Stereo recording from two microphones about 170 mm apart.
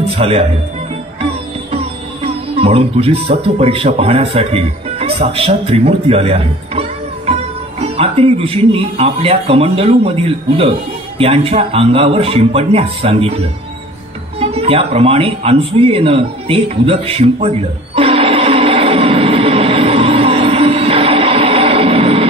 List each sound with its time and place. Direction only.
0.0 s music: 35° right (ahead or behind)
1.2 s a man's voice: 35° right (ahead or behind)
14.4 s a sound: 35° right (ahead or behind)